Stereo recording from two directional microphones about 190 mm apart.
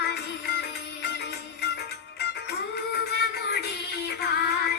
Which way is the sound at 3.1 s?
60° left (ahead or behind).